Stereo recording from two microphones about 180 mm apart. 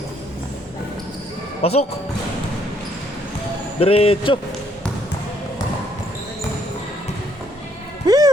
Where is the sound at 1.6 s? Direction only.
35° left (ahead or behind).